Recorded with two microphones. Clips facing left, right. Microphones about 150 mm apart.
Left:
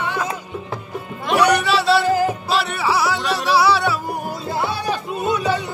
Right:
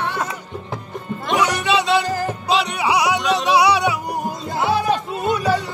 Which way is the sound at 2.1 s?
10° left (ahead or behind).